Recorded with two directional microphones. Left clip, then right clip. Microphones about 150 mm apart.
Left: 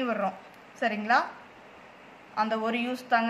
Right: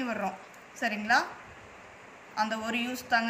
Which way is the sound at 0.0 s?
50° left (ahead or behind).